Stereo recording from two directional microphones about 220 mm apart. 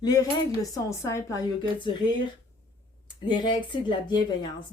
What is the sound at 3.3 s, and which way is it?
Speech, 20° left (ahead or behind).